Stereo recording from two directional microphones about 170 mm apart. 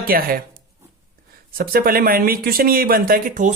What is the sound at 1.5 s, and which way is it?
Speech, 60° right (ahead or behind).